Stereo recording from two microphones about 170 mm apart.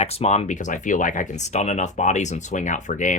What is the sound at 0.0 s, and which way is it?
Speech, 35° left (ahead or behind).